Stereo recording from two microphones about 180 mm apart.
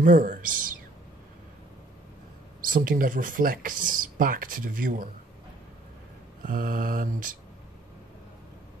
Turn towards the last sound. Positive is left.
turn(degrees=-50)  # may be behind; listen again after turning